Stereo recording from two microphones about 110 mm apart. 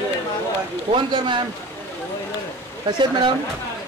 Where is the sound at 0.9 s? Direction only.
45° right (ahead or behind).